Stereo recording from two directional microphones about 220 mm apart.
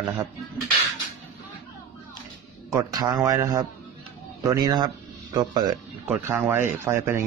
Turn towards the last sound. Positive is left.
turn(degrees=-10)  # may be behind; listen again after turning